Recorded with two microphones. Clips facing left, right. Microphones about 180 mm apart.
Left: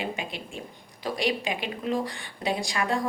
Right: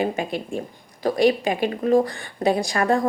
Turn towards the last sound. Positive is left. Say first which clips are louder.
# right 7 dB
turn(degrees=-50)  # may be behind; listen again after turning